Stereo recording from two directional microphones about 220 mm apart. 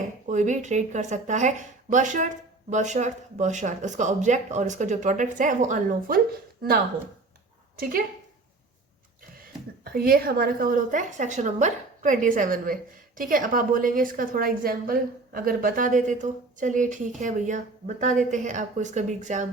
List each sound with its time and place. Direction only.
0.3 s a woman's voice: 35° right (ahead or behind)
9.8 s a woman's voice: 45° right (ahead or behind)